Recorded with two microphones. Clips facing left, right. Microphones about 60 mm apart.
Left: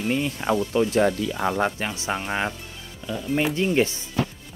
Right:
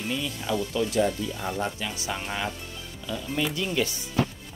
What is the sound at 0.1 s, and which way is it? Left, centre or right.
Speech, left.